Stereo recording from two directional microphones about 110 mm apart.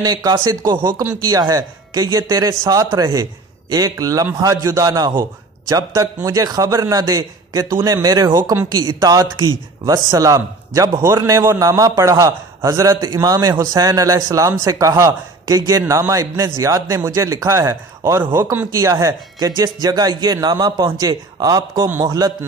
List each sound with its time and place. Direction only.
0.0 s a man's voice: 35° right (ahead or behind)